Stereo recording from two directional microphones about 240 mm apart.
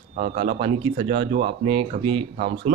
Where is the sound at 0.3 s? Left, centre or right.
Right.